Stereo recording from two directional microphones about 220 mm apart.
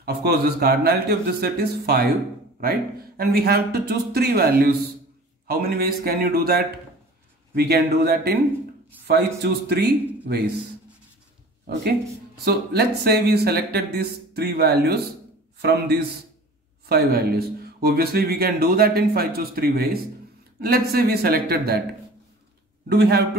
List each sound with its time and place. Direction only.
0.0 s speech: 45° right (ahead or behind)
12.4 s speech: 45° right (ahead or behind)
16.9 s speech: 45° right (ahead or behind)
22.8 s speech: 50° right (ahead or behind)